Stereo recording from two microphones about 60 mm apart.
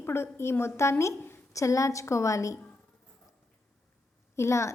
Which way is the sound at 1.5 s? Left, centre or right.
Left.